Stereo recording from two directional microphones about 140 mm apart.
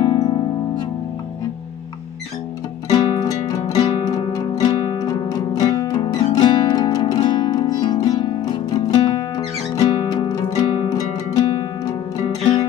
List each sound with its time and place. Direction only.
0.2 s music: 35° left (ahead or behind)
2.9 s music: 25° left (ahead or behind)